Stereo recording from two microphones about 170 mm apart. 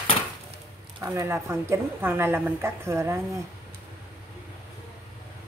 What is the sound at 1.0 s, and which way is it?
Speech, 15° right (ahead or behind).